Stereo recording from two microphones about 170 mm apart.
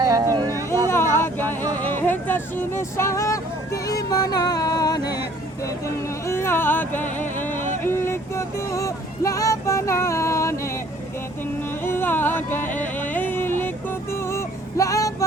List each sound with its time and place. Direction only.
0.0 s a sound: 25° right (ahead or behind)
0.9 s vehicle: 15° left (ahead or behind)
1.7 s speech: 10° left (ahead or behind)
6.2 s a sound: 15° left (ahead or behind)
7.8 s speech: 15° left (ahead or behind)
11.8 s music: 10° left (ahead or behind)